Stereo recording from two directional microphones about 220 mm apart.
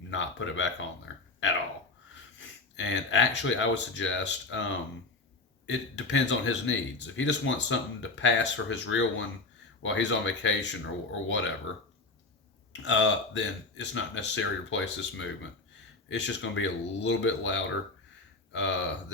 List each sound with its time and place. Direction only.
0.1 s speech: 60° left (ahead or behind)
5.6 s speech: 55° left (ahead or behind)
12.7 s speech: 55° left (ahead or behind)